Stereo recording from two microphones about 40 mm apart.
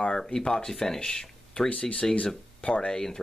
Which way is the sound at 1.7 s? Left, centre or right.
Left.